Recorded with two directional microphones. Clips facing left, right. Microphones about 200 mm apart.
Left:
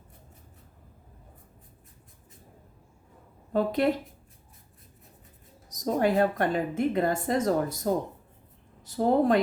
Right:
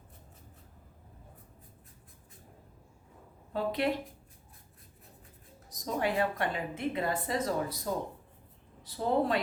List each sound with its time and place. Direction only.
3.5 s a woman's voice: 45° left (ahead or behind)
5.6 s a woman's voice: 40° left (ahead or behind)